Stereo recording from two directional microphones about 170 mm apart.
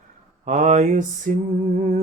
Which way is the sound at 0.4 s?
40° right (ahead or behind).